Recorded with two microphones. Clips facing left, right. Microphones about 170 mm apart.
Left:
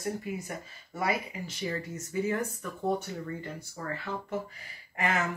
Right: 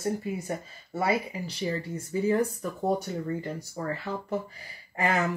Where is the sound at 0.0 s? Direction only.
25° right (ahead or behind).